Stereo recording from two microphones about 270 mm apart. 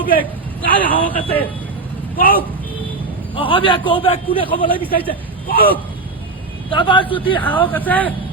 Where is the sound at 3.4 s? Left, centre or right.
Centre.